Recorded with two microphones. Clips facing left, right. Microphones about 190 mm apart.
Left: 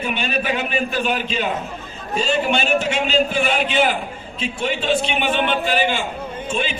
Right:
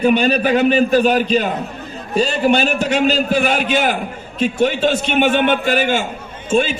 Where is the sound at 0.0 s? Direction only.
40° right (ahead or behind).